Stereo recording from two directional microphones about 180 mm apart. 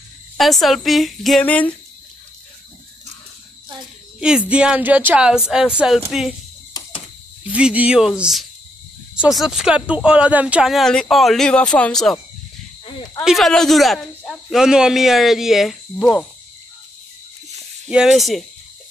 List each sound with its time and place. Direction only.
0.4 s speech: centre (ahead or behind)
4.2 s speech: 5° right (ahead or behind)
7.4 s speech: 5° right (ahead or behind)
12.8 s speech: 25° left (ahead or behind)
13.2 s speech: centre (ahead or behind)
17.8 s speech: 5° right (ahead or behind)